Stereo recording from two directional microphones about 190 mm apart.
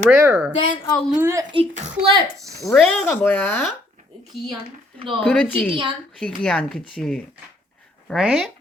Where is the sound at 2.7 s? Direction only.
5° left (ahead or behind).